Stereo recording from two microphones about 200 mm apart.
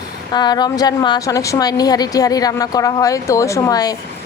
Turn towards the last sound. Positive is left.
turn(degrees=20)  # may be behind; listen again after turning